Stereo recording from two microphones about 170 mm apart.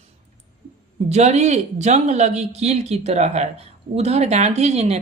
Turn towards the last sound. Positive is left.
turn(degrees=-40)  # may be behind; listen again after turning